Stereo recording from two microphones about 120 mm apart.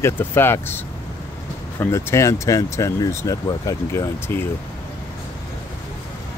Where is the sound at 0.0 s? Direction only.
20° left (ahead or behind).